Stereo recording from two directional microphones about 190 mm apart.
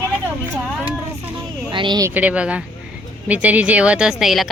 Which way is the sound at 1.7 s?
25° right (ahead or behind).